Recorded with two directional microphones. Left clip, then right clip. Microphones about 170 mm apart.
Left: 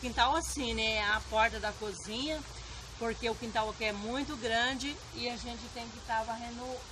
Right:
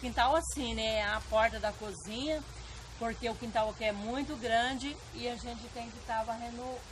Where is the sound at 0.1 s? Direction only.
40° right (ahead or behind).